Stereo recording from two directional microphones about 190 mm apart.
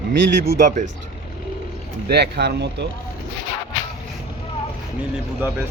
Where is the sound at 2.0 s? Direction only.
60° right (ahead or behind).